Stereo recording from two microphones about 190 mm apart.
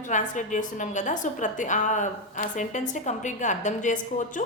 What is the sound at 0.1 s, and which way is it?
A woman's voice, 40° left (ahead or behind).